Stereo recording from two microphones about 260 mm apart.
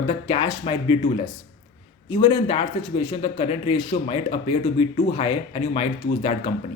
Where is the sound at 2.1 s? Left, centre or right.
Centre.